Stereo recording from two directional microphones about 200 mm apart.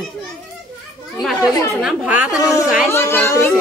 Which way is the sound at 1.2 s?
5° right (ahead or behind).